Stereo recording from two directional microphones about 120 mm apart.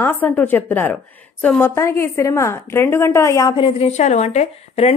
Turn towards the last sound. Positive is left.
turn(degrees=65)  # may be behind; listen again after turning